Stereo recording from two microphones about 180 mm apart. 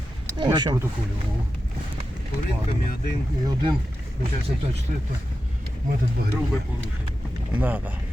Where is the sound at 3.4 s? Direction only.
25° right (ahead or behind).